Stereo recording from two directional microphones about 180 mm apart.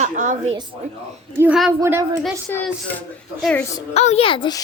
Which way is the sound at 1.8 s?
15° right (ahead or behind).